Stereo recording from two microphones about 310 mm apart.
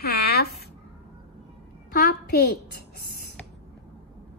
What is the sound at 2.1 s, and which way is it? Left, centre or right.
Speech, left.